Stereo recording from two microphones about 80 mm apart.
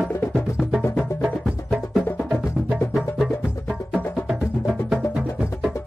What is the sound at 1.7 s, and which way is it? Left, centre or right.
Music, centre.